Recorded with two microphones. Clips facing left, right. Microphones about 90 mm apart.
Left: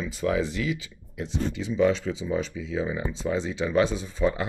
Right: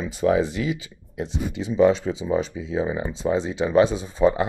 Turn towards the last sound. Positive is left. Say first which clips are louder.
# right 6 dB
turn(degrees=-20)  # may be behind; listen again after turning